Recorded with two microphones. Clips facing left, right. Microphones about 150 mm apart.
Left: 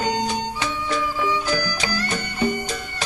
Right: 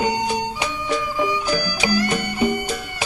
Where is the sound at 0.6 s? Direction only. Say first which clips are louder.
Right 1 dB; 15° right (ahead or behind).